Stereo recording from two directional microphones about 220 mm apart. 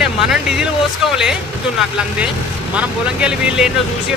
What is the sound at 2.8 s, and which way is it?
Speech, 5° right (ahead or behind).